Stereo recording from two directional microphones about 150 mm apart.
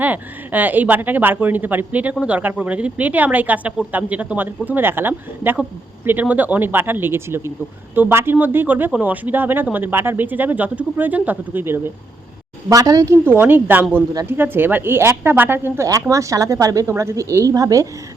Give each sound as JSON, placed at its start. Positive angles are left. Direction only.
{"t": 0.0, "sound": "speech", "side_deg": -10}